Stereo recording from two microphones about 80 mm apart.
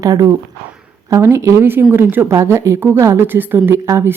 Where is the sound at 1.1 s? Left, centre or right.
Right.